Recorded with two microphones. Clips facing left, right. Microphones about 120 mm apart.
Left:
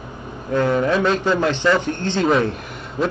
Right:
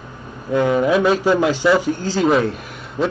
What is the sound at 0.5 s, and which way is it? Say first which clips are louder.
A man's voice: right 2 dB; 10° right (ahead or behind).